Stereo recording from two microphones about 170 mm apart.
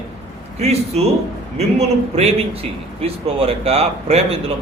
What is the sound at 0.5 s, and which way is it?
A man's voice, 40° right (ahead or behind).